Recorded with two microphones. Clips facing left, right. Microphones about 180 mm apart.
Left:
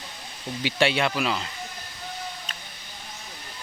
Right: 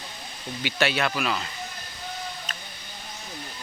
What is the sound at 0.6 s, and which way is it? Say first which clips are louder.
Speech: left 2 dB; 25° left (ahead or behind).